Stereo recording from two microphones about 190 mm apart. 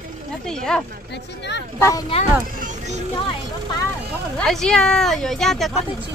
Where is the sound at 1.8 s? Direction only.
15° left (ahead or behind).